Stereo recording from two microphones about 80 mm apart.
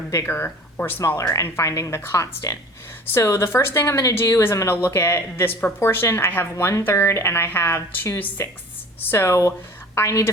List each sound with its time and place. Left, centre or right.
0.1 s a woman's voice: left
1.2 s a woman's voice: left